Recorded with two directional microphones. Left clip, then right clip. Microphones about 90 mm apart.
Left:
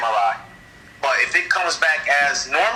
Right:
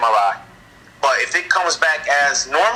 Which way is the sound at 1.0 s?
35° right (ahead or behind).